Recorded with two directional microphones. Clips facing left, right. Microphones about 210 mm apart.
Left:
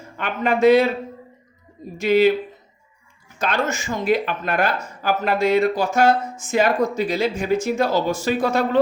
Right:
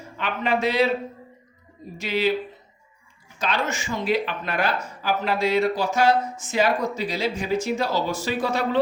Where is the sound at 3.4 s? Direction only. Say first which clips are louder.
Left 3 dB; 45° left (ahead or behind).